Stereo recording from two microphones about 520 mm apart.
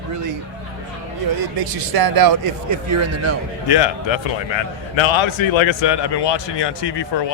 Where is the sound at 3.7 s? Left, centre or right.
Left.